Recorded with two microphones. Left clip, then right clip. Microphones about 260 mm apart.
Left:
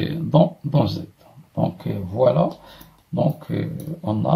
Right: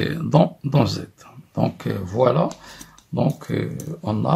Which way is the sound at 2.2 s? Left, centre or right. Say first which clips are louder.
Left 1 dB; right.